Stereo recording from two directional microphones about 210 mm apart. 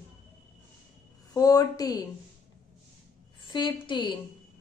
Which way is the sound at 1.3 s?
15° left (ahead or behind).